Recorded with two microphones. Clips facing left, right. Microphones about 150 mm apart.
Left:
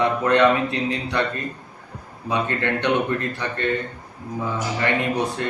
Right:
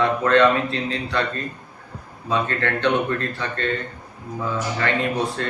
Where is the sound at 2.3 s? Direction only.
15° left (ahead or behind).